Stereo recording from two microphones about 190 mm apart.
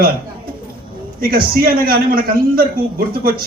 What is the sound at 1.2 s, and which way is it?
A man's voice, 50° right (ahead or behind).